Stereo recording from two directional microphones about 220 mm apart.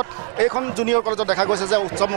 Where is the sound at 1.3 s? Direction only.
25° right (ahead or behind).